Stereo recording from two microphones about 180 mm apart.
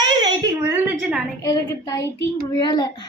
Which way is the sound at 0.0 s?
25° right (ahead or behind).